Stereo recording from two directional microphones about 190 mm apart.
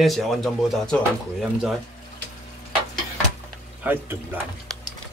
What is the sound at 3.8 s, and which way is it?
Speech, 10° right (ahead or behind).